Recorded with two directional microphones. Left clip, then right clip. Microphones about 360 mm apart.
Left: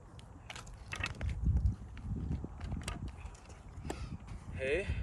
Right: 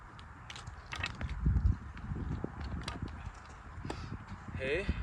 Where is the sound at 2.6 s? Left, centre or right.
Centre.